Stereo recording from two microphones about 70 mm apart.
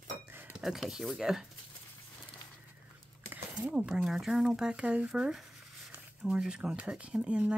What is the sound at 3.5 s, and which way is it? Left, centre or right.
Speech, centre.